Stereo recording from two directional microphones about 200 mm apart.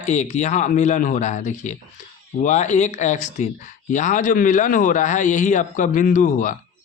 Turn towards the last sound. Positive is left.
turn(degrees=40)  # may be behind; listen again after turning